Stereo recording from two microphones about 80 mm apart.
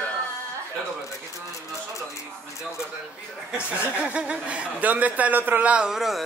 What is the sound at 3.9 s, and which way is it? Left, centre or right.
A man's voice, centre.